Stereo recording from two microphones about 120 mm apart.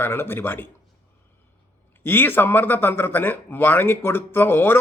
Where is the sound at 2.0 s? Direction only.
20° left (ahead or behind).